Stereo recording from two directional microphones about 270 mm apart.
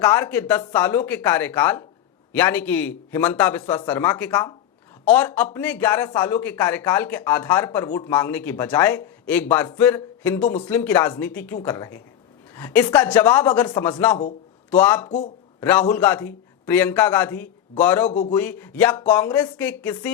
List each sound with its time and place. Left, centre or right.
0.0 s speech: centre
18.1 s a man's voice: left
18.3 s speech: centre